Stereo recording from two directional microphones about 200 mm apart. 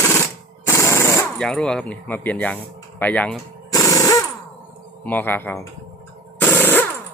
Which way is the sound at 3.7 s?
15° left (ahead or behind).